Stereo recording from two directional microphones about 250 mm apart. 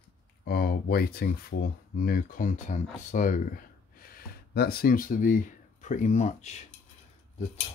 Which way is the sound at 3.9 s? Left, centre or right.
Left.